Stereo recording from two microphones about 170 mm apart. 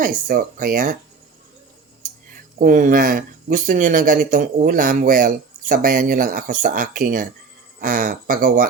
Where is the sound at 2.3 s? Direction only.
55° right (ahead or behind).